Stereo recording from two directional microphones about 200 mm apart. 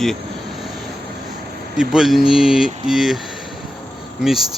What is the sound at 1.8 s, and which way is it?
Speech, centre (ahead or behind).